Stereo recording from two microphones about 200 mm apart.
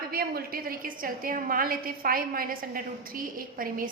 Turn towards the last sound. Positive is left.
turn(degrees=-45)  # may be behind; listen again after turning